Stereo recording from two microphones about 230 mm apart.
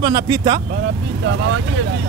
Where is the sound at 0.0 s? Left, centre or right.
Centre.